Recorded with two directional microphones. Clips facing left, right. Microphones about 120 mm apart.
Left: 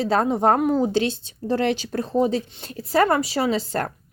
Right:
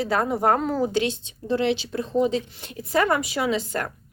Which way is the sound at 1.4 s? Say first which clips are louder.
Left 1 dB; 45° left (ahead or behind).